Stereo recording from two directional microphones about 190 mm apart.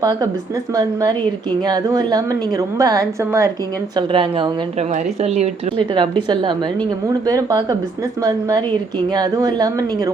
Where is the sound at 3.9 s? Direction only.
25° right (ahead or behind).